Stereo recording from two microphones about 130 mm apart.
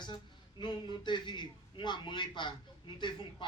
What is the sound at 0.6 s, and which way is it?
A man's voice, 35° left (ahead or behind).